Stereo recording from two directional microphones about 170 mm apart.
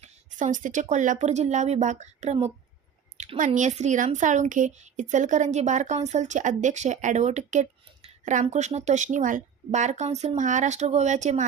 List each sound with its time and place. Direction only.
0.0 s speech: 45° right (ahead or behind)